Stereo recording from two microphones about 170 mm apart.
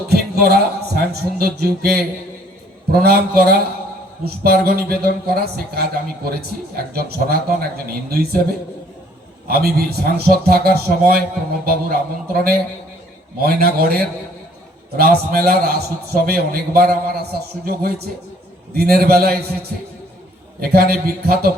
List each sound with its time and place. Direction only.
0.1 s a man's voice: 65° right (ahead or behind)
20.6 s speech: 65° right (ahead or behind)